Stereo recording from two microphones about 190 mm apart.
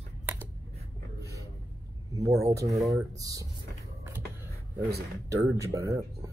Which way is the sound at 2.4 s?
15° right (ahead or behind).